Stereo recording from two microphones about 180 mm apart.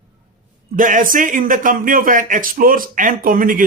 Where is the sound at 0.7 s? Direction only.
45° right (ahead or behind).